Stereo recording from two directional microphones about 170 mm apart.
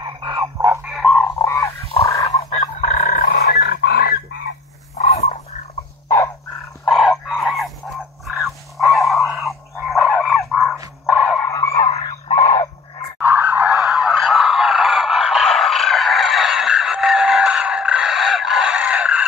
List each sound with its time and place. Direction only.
0.0 s chicken: 25° right (ahead or behind)
0.8 s frog: centre (ahead or behind)
1.4 s frog: 15° left (ahead or behind)
2.8 s fowl: 50° left (ahead or behind); by 4.2 s 70° left (ahead or behind)
4.9 s dog: 45° left (ahead or behind)
6.0 s dog: 15° left (ahead or behind)
6.9 s fowl: centre (ahead or behind)
8.7 s fowl: centre (ahead or behind)
10.8 s dog: 10° right (ahead or behind)
11.4 s a sound: 20° left (ahead or behind)
13.2 s a sound: 10° right (ahead or behind)